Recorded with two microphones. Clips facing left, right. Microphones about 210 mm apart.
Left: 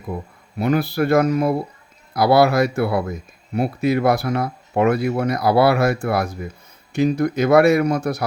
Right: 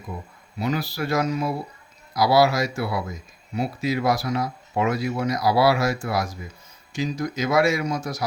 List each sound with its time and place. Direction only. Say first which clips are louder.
0.6 s speech: left 7 dB; 55° left (ahead or behind)